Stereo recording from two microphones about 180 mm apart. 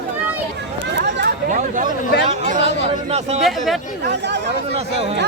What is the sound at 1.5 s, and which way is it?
Speech, 45° right (ahead or behind).